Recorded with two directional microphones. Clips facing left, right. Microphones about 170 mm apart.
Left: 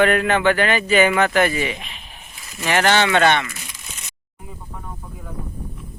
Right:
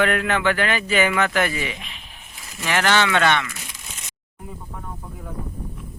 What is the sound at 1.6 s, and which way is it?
Speech, 50° left (ahead or behind).